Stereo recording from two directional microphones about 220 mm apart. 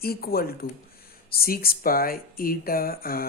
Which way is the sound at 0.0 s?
45° left (ahead or behind).